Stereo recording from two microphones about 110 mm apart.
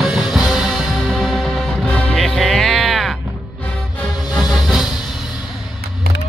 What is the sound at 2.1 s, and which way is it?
Music, centre (ahead or behind).